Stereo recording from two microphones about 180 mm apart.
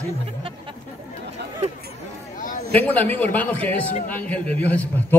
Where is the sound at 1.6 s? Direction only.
35° right (ahead or behind).